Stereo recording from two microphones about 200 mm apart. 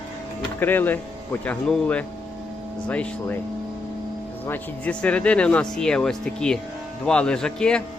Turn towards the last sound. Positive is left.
turn(degrees=5)  # may be behind; listen again after turning